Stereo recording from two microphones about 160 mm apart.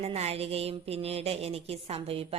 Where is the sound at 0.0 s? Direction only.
40° right (ahead or behind).